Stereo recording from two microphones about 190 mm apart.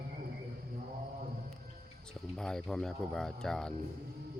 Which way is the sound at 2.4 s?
5° left (ahead or behind).